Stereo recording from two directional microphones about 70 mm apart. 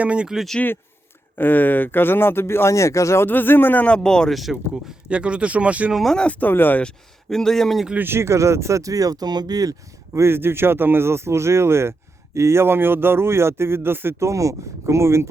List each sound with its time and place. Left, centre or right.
0.0 s speech: centre
0.3 s speech: centre
1.4 s speech: left
3.2 s speech: left
3.8 s speech: centre
4.4 s speech: centre
5.9 s speech: centre
6.4 s speech: left
6.8 s speech: centre
7.9 s speech: right
10.2 s speech: right